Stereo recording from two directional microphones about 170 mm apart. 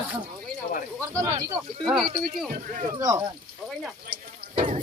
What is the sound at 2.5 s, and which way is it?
Speech, 50° right (ahead or behind).